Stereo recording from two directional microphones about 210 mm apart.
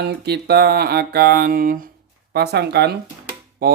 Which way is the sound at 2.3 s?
50° right (ahead or behind).